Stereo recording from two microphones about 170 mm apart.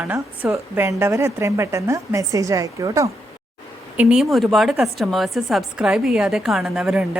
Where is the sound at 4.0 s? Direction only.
5° right (ahead or behind).